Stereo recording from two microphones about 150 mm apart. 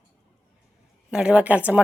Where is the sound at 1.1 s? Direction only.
5° right (ahead or behind).